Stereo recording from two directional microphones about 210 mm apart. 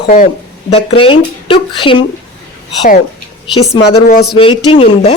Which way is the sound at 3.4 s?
25° left (ahead or behind).